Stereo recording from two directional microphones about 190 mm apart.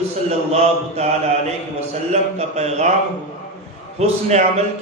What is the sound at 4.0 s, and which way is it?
Speech, 35° right (ahead or behind).